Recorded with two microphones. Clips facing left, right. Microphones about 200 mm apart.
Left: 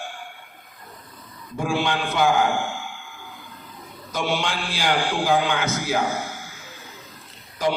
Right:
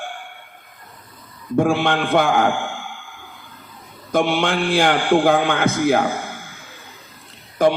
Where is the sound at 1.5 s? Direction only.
55° right (ahead or behind).